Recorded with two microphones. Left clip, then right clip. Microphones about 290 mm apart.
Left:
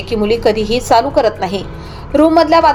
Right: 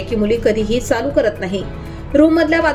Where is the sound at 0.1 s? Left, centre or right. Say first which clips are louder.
Left 3 dB; centre.